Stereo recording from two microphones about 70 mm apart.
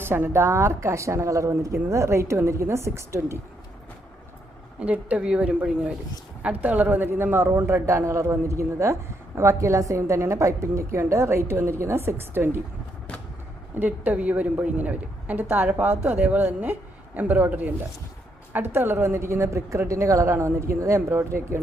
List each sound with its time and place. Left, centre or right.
0.0 s a man's voice: right
4.8 s a woman's voice: centre; by 12.5 s right
13.7 s a woman's voice: right